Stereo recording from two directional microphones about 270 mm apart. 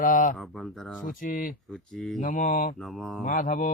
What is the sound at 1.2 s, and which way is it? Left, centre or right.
Speech, left.